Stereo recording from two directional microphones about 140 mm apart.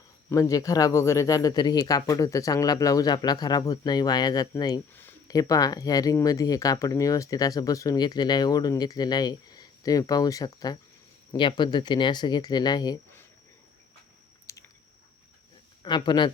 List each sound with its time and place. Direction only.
0.3 s speech: 20° left (ahead or behind)
14.5 s chewing: 20° left (ahead or behind)
15.8 s speech: 35° left (ahead or behind)